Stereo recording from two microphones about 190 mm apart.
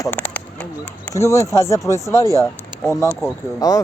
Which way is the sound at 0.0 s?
10° left (ahead or behind).